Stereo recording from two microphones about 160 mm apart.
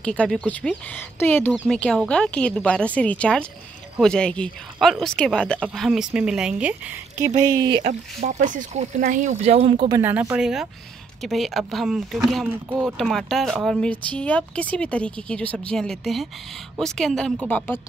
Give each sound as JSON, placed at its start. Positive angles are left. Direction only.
{"t": 0.0, "sound": "speech", "side_deg": 5}
{"t": 7.2, "sound": "speech", "side_deg": -25}
{"t": 7.8, "sound": "speech", "side_deg": -50}
{"t": 9.9, "sound": "a woman's voice", "side_deg": -15}